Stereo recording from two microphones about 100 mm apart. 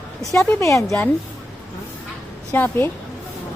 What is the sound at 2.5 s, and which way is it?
Speech, 20° left (ahead or behind).